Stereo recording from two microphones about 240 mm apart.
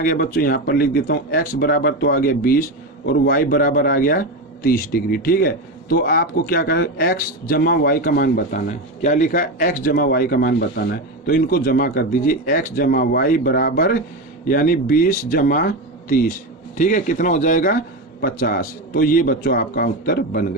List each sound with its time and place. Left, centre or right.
0.0 s a man's voice: left